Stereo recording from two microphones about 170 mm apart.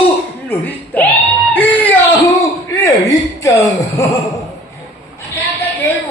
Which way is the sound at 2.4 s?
20° left (ahead or behind).